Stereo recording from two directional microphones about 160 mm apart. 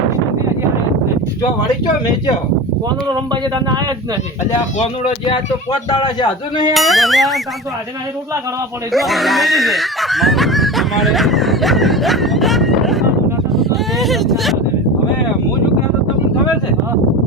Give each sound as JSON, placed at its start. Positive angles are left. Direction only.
{"t": 3.5, "sound": "speech", "side_deg": -25}
{"t": 4.8, "sound": "speech", "side_deg": 35}
{"t": 6.7, "sound": "speech", "side_deg": 0}
{"t": 8.9, "sound": "speech", "side_deg": 0}